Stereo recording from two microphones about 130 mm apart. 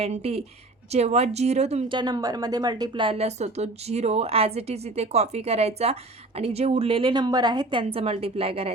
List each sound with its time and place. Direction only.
0.0 s a woman's voice: 50° right (ahead or behind)
1.9 s a woman's voice: 35° right (ahead or behind)